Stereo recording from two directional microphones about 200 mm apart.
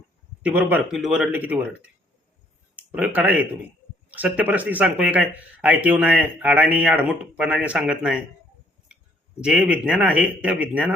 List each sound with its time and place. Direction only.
0.4 s speech: 10° right (ahead or behind)
2.7 s speech: 5° right (ahead or behind)
9.4 s speech: 5° right (ahead or behind)